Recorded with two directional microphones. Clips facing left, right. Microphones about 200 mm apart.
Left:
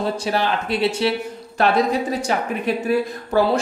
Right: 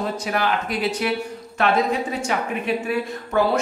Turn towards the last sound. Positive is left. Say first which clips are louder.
# left 2 dB
turn(degrees=35)  # may be behind; listen again after turning